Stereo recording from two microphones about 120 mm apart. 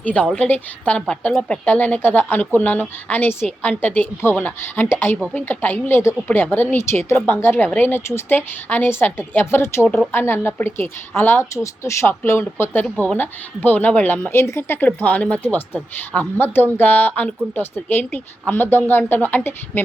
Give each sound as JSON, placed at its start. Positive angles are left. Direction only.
{"t": 0.0, "sound": "a woman's voice", "side_deg": 10}